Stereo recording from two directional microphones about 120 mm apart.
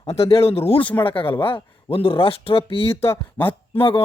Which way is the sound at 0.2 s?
55° left (ahead or behind).